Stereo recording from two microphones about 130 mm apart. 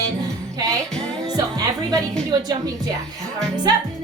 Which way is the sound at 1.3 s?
25° right (ahead or behind).